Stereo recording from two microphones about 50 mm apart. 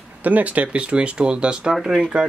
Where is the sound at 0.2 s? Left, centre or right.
Right.